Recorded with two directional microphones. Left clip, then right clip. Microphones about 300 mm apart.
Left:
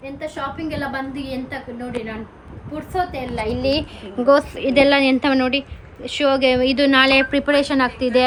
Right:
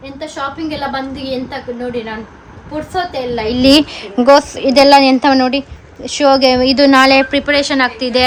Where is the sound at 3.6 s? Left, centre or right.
Right.